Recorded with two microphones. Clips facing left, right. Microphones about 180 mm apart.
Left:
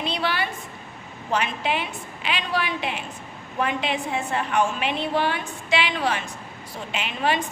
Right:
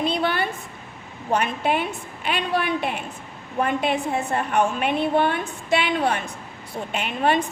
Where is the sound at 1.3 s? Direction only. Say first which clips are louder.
Right 3 dB; 50° right (ahead or behind).